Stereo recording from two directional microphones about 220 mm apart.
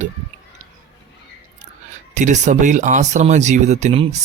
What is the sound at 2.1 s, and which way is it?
Speech, 35° right (ahead or behind).